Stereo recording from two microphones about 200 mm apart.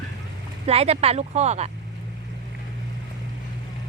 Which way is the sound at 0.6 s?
30° right (ahead or behind).